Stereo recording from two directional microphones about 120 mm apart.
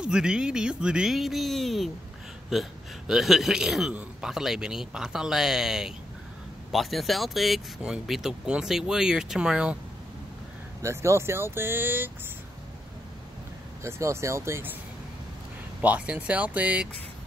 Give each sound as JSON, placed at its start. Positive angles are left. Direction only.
{"t": 0.0, "sound": "speech", "side_deg": -5}
{"t": 10.8, "sound": "speech", "side_deg": -25}
{"t": 13.8, "sound": "speech", "side_deg": -20}
{"t": 15.8, "sound": "speech", "side_deg": -10}